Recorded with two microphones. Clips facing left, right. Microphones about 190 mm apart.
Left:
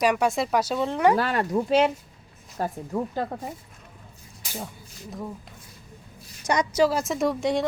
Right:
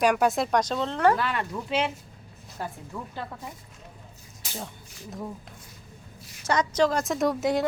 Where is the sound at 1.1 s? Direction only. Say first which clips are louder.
Left 5 dB; 40° left (ahead or behind).